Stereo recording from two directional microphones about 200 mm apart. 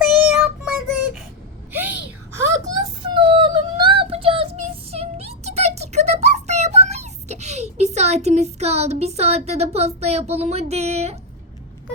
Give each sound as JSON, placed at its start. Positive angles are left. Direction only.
{"t": 0.0, "sound": "child singing", "side_deg": -5}
{"t": 1.7, "sound": "a sound", "side_deg": -10}
{"t": 2.8, "sound": "child singing", "side_deg": -25}